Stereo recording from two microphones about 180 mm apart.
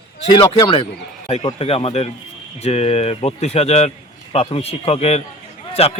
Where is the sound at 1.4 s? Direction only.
35° left (ahead or behind).